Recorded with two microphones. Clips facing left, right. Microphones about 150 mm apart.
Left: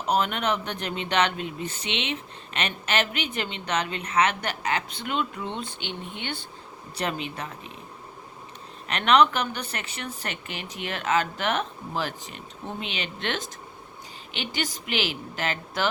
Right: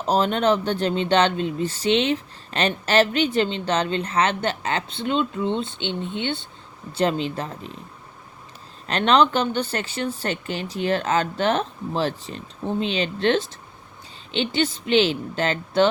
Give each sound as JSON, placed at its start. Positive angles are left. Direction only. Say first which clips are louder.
{"t": 0.0, "sound": "speech", "louder": "right 5 dB", "side_deg": -30}
{"t": 8.9, "sound": "a woman's voice", "louder": "right 2 dB", "side_deg": -30}